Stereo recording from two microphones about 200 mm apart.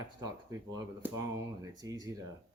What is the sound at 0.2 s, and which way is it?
Speech, 20° right (ahead or behind).